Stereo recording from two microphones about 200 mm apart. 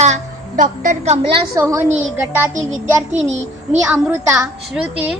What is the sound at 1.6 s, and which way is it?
Speech, 15° right (ahead or behind).